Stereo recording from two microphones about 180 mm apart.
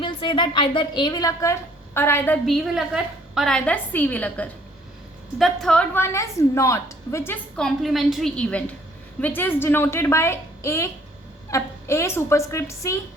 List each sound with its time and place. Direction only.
0.0 s a woman's voice: 25° left (ahead or behind); by 2.6 s 10° left (ahead or behind)
2.7 s a woman's voice: centre (ahead or behind); by 13.0 s 15° left (ahead or behind)